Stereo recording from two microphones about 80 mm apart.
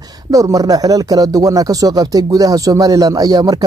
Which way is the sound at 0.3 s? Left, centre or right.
Right.